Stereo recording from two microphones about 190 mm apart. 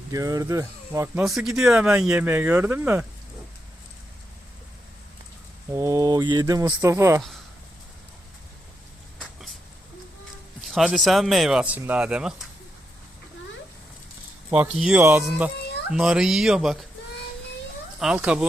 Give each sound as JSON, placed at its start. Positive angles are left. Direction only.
{"t": 0.1, "sound": "speech", "side_deg": -20}
{"t": 1.2, "sound": "speech", "side_deg": 0}
{"t": 5.7, "sound": "speech", "side_deg": -15}
{"t": 10.6, "sound": "speech", "side_deg": 0}
{"t": 14.5, "sound": "speech", "side_deg": -5}
{"t": 15.5, "sound": "a sound", "side_deg": 60}
{"t": 15.9, "sound": "speech", "side_deg": -5}
{"t": 18.0, "sound": "speech", "side_deg": -5}